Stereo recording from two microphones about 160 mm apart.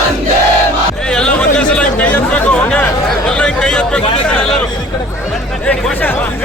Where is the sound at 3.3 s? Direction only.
5° left (ahead or behind).